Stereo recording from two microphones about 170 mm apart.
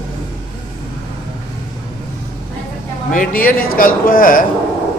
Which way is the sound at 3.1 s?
55° left (ahead or behind).